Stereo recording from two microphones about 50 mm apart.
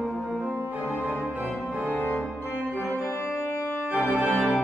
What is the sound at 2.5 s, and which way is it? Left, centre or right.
Organ, right.